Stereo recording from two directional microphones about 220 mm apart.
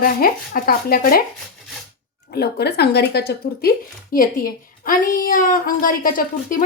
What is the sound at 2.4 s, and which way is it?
A woman's voice, 50° left (ahead or behind).